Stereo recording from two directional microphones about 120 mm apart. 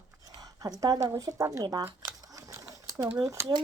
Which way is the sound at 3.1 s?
30° right (ahead or behind).